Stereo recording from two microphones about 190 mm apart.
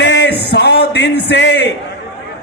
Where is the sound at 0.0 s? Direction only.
65° left (ahead or behind).